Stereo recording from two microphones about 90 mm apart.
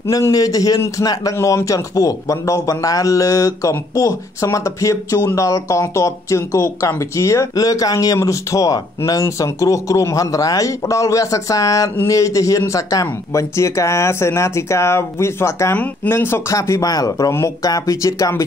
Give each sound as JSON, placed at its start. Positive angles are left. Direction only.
{"t": 0.3, "sound": "a man's voice", "side_deg": 40}
{"t": 15.7, "sound": "speech", "side_deg": 15}
{"t": 16.5, "sound": "a man's voice", "side_deg": 35}
{"t": 17.3, "sound": "speech", "side_deg": 30}
{"t": 17.6, "sound": "a man's voice", "side_deg": 40}